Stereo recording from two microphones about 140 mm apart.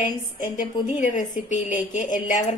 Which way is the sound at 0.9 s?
65° left (ahead or behind).